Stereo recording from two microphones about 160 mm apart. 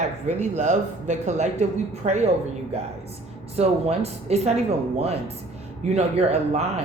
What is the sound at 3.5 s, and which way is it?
Speech, 40° right (ahead or behind).